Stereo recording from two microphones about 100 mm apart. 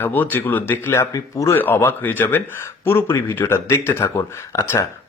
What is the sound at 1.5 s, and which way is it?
Speech, 20° left (ahead or behind).